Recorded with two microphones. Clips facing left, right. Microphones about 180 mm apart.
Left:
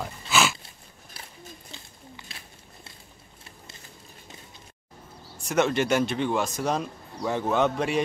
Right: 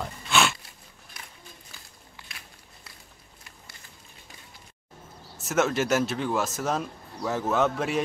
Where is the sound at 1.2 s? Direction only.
30° left (ahead or behind).